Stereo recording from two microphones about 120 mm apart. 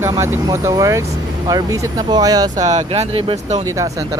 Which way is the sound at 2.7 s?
65° right (ahead or behind).